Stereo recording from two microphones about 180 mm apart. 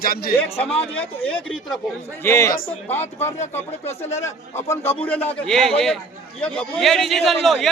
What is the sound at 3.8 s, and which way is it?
Speech, 35° left (ahead or behind).